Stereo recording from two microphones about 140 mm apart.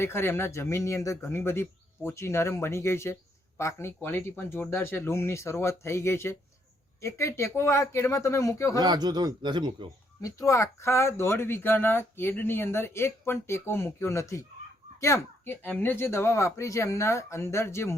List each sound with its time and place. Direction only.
0.0 s speech: 15° left (ahead or behind)
8.8 s speech: 30° right (ahead or behind)
10.2 s speech: 25° left (ahead or behind)